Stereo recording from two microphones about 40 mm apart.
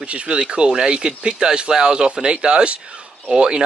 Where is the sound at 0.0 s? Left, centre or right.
Right.